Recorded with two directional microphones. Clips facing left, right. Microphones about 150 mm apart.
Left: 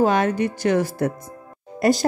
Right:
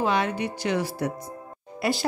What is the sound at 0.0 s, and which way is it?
A woman's voice, 45° left (ahead or behind).